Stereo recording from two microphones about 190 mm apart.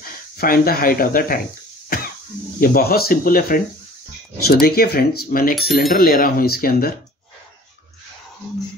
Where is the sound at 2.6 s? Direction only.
50° left (ahead or behind).